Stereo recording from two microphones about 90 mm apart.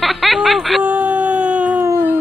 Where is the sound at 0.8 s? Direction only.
15° right (ahead or behind).